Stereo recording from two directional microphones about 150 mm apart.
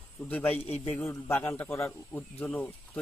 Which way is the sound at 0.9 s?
15° left (ahead or behind).